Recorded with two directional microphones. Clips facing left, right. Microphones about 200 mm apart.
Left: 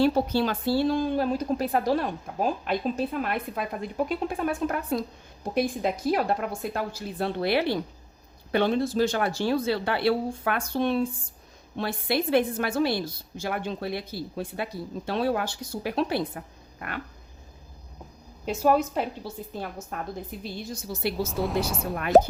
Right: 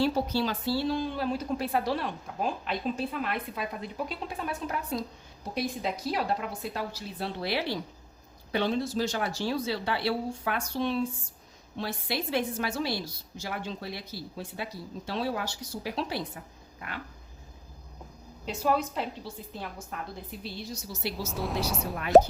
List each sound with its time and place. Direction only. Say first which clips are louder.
0.0 s a woman's voice: left 4 dB; 55° left (ahead or behind)
18.4 s a woman's voice: left 5 dB; 45° left (ahead or behind)
21.2 s speech: left 4 dB; centre (ahead or behind)